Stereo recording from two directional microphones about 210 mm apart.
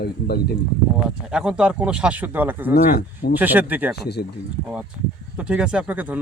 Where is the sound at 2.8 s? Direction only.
50° left (ahead or behind).